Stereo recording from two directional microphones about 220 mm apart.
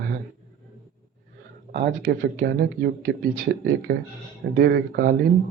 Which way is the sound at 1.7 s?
45° right (ahead or behind).